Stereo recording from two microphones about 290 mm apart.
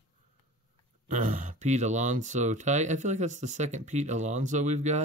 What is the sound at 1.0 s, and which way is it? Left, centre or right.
Speech, right.